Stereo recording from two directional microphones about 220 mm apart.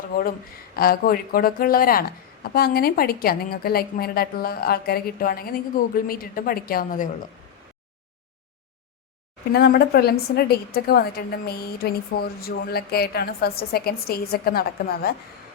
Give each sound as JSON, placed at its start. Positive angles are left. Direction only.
{"t": 0.8, "sound": "a woman's voice", "side_deg": 40}
{"t": 9.5, "sound": "a woman's voice", "side_deg": 45}